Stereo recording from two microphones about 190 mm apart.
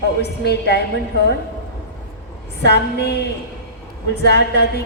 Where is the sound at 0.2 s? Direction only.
60° left (ahead or behind).